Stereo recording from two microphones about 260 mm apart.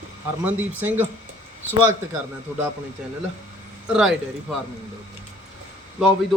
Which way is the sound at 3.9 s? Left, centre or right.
Centre.